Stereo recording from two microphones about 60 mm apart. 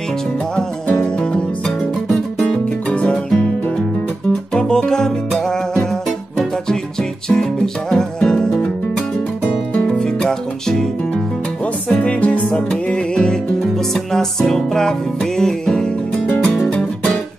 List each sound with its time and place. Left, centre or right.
0.8 s music: centre
4.6 s music: centre
9.8 s music: centre
11.9 s music: centre